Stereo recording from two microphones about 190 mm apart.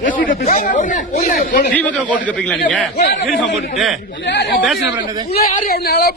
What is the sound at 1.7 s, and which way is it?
Speech, 5° left (ahead or behind).